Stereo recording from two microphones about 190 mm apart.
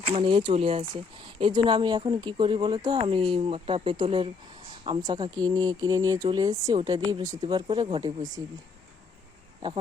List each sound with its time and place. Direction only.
0.0 s speech: 30° right (ahead or behind)